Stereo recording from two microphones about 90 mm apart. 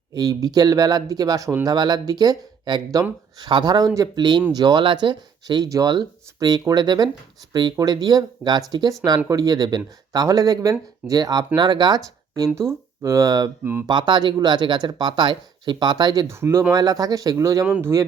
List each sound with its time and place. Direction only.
0.1 s speech: 40° right (ahead or behind)
4.2 s speech: 55° right (ahead or behind)
5.6 s speech: 40° right (ahead or behind)
13.8 s speech: 55° right (ahead or behind)
16.2 s speech: 30° right (ahead or behind)
16.7 s speech: 45° right (ahead or behind)